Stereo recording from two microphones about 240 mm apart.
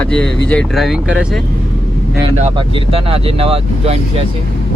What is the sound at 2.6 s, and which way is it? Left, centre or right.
Speech, right.